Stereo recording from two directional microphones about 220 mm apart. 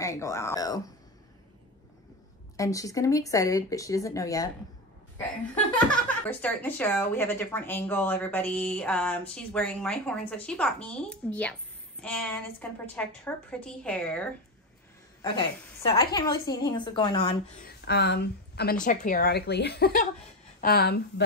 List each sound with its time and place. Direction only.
0.0 s speech: 15° left (ahead or behind)
2.5 s speech: 15° left (ahead or behind)
6.2 s a woman's voice: 10° left (ahead or behind)
15.2 s a woman's voice: 20° left (ahead or behind)
17.8 s a woman's voice: 50° left (ahead or behind)
18.9 s a woman's voice: 35° left (ahead or behind)